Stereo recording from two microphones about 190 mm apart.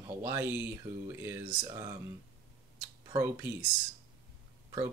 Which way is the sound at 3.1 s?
15° right (ahead or behind).